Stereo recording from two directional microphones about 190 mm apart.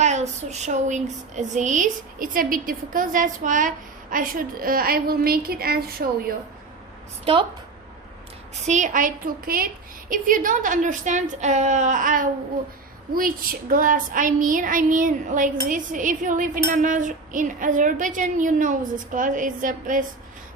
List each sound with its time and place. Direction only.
0.0 s speech: 35° right (ahead or behind); by 6.3 s 55° right (ahead or behind)
8.6 s speech: 40° right (ahead or behind)